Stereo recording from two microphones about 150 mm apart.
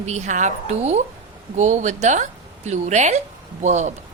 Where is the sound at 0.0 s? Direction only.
50° right (ahead or behind).